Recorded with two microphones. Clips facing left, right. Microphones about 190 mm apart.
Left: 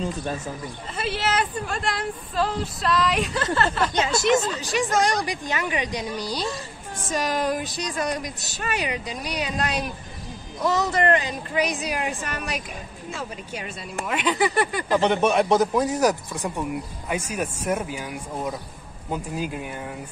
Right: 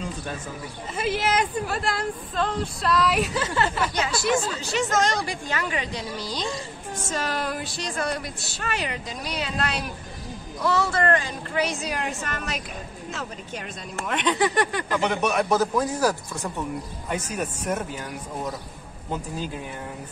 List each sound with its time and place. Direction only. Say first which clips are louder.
0.9 s speech: right 1 dB; 10° right (ahead or behind)
3.9 s speech: left 3 dB; 25° left (ahead or behind); by 14.9 s 5° left (ahead or behind)
14.9 s speech: left 4 dB; 30° left (ahead or behind); by 19.6 s 10° left (ahead or behind)